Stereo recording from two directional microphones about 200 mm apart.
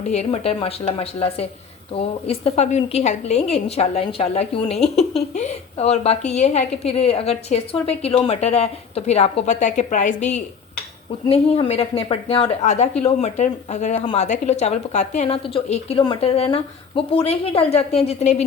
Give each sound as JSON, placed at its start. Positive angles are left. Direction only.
{"t": 0.1, "sound": "a woman's voice", "side_deg": 30}